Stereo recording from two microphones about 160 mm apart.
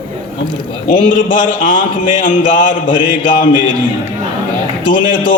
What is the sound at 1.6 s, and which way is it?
Speech, 60° left (ahead or behind).